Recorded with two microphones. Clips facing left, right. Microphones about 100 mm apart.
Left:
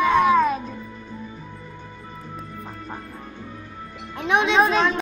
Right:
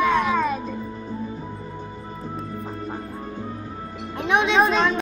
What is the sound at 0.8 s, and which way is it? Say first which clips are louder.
Music: right 6 dB; 35° right (ahead or behind).